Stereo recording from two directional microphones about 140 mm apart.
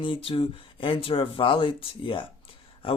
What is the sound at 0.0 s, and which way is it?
Speech, 40° left (ahead or behind).